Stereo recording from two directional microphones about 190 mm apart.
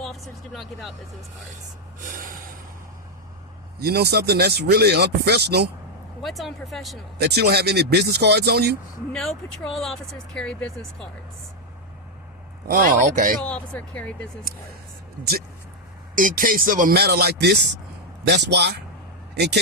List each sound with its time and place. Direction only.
0.0 s speech: centre (ahead or behind)
3.8 s speech: 55° right (ahead or behind)
6.2 s speech: centre (ahead or behind)
7.2 s speech: 60° right (ahead or behind)
9.1 s speech: centre (ahead or behind)
12.6 s speech: 45° right (ahead or behind)
13.4 s speech: 5° left (ahead or behind)
16.1 s speech: 45° right (ahead or behind); by 19.5 s 60° right (ahead or behind)